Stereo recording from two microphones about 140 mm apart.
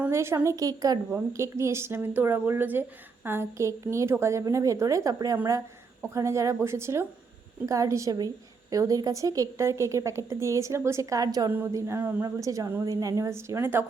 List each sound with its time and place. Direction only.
0.1 s a woman's voice: 20° right (ahead or behind)